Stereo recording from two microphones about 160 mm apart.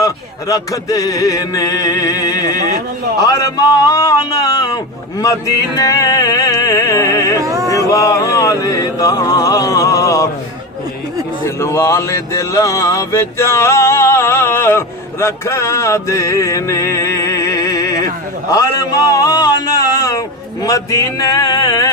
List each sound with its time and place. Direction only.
0.0 s music: 20° left (ahead or behind)
7.3 s music: 20° right (ahead or behind)
7.9 s music: 20° left (ahead or behind)
11.4 s a sound: 15° left (ahead or behind)
18.5 s a man's voice: 20° left (ahead or behind)